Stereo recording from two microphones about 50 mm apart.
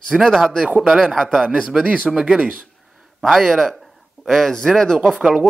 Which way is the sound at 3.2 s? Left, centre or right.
Centre.